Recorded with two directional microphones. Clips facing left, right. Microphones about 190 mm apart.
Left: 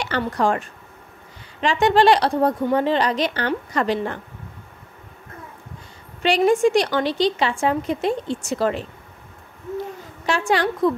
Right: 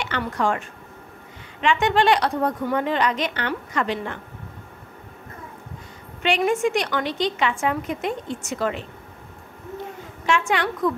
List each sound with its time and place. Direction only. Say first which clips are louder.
0.2 s a woman's voice: left 3 dB; 35° left (ahead or behind)
6.2 s a woman's voice: left 4 dB; 35° left (ahead or behind)
10.2 s a woman's voice: left 2 dB; 35° left (ahead or behind)